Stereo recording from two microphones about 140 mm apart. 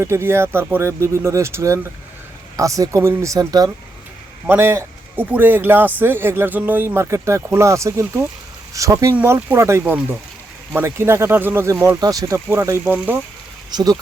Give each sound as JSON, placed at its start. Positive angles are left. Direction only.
{"t": 0.0, "sound": "speech", "side_deg": -15}
{"t": 4.4, "sound": "speech", "side_deg": -15}
{"t": 13.7, "sound": "speech", "side_deg": -30}